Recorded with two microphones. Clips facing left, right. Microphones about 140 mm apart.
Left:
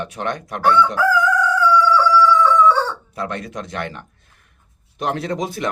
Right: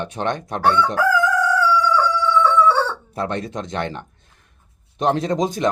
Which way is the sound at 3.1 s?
25° right (ahead or behind).